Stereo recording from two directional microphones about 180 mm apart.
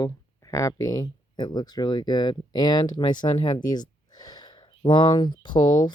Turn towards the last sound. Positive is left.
turn(degrees=25)  # may be behind; listen again after turning